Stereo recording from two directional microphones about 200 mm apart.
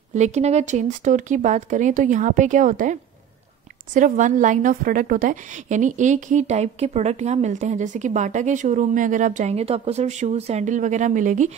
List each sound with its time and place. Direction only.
0.1 s a woman's voice: 35° right (ahead or behind)